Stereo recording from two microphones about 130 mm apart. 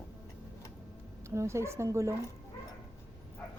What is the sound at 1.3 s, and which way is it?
Speech, 20° right (ahead or behind).